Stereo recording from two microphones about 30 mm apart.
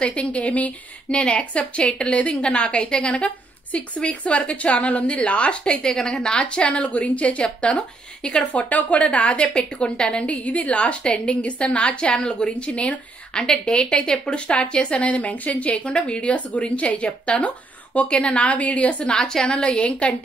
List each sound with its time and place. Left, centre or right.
0.0 s a woman's voice: left
1.1 s a woman's voice: left
5.9 s a woman's voice: left
8.5 s a woman's voice: left
9.4 s a woman's voice: left
10.2 s a woman's voice: left
13.3 s a woman's voice: left
15.8 s a woman's voice: left
19.1 s a woman's voice: centre
19.4 s a woman's voice: left